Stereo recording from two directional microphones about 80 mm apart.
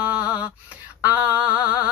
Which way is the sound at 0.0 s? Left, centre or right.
Centre.